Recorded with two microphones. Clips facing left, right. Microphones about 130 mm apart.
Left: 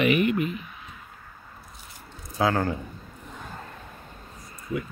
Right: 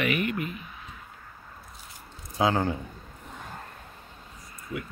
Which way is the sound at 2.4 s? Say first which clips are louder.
Left 1 dB; 20° right (ahead or behind).